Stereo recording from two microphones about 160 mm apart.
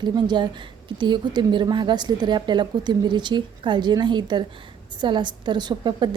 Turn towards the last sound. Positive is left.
turn(degrees=-30)  # may be behind; listen again after turning